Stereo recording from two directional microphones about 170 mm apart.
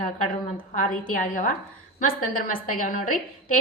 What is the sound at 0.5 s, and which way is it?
A woman's voice, 55° left (ahead or behind).